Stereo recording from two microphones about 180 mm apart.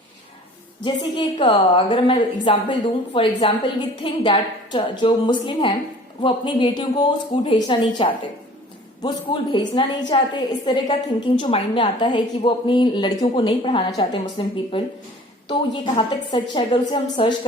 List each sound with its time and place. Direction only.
0.8 s a woman's voice: 25° left (ahead or behind)